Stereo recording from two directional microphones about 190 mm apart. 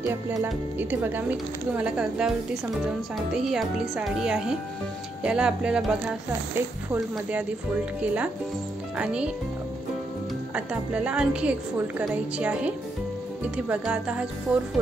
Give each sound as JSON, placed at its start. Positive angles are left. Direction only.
{"t": 0.0, "sound": "a woman's voice", "side_deg": -15}
{"t": 3.3, "sound": "a woman's voice", "side_deg": 0}
{"t": 10.5, "sound": "a woman's voice", "side_deg": -5}